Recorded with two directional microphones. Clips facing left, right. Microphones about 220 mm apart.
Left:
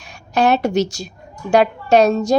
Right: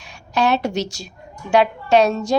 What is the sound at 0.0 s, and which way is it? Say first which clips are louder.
A woman's voice: left 3 dB; 50° left (ahead or behind).